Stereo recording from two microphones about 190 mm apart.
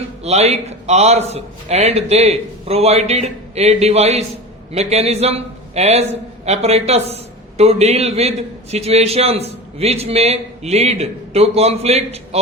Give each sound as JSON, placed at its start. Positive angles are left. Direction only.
{"t": 0.2, "sound": "a man's voice", "side_deg": -35}